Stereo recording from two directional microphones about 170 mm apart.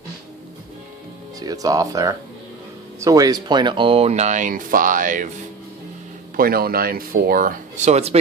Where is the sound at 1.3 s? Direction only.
20° right (ahead or behind); by 5.4 s 50° right (ahead or behind).